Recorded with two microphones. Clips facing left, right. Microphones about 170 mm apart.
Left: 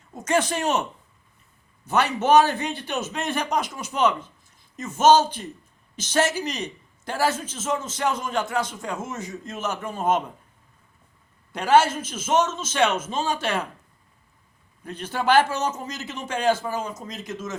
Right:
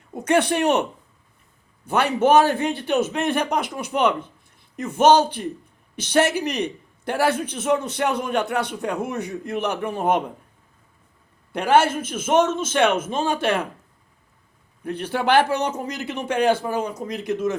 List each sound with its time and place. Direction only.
0.1 s a man's voice: 60° right (ahead or behind)
1.9 s a man's voice: 55° right (ahead or behind)
11.5 s a man's voice: 55° right (ahead or behind)
14.8 s a man's voice: 60° right (ahead or behind)